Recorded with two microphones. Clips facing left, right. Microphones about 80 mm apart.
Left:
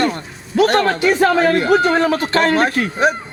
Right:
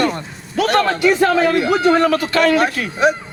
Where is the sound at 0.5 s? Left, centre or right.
Left.